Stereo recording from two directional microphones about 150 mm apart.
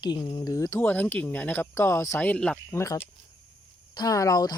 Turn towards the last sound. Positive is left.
turn(degrees=25)  # may be behind; listen again after turning